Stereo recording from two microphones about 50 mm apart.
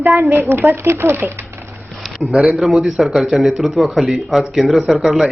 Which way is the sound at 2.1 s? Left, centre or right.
Centre.